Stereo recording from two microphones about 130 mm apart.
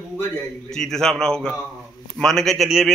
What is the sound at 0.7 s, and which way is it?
A man's voice, 5° left (ahead or behind).